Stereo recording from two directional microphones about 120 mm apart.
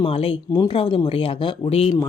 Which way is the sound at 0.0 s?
55° left (ahead or behind).